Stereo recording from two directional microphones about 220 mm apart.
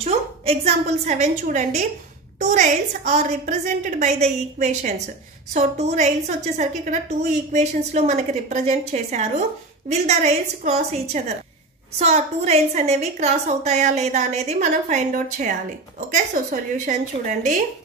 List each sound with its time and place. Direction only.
0.0 s a woman's voice: 30° right (ahead or behind)